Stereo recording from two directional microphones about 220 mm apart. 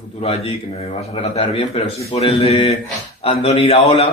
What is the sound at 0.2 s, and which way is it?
A man's voice, 25° left (ahead or behind).